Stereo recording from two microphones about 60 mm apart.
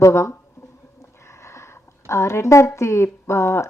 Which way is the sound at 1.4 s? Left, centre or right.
Left.